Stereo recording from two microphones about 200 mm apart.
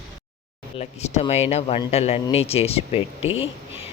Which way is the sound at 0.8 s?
30° left (ahead or behind).